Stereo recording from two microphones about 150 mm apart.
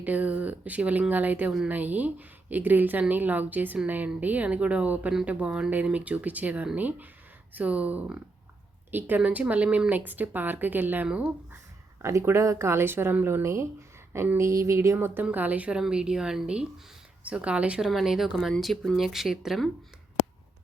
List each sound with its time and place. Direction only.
0.0 s speech: 10° right (ahead or behind)